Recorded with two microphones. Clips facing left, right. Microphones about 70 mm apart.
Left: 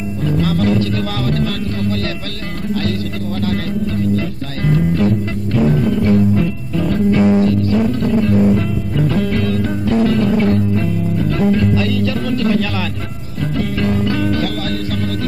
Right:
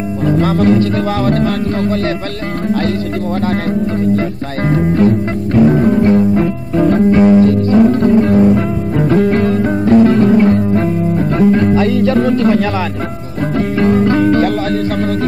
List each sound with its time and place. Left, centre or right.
0.2 s music: right
4.6 s music: right